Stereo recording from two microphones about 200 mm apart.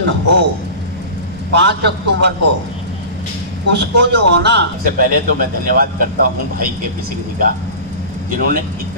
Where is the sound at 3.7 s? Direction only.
60° right (ahead or behind).